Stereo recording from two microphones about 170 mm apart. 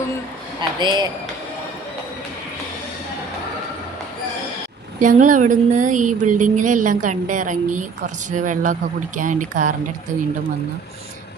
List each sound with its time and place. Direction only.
0.8 s a man's voice: 25° right (ahead or behind)
4.9 s a woman's voice: 50° right (ahead or behind)